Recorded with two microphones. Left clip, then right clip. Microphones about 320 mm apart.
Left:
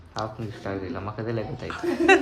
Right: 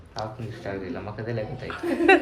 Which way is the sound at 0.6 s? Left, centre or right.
Left.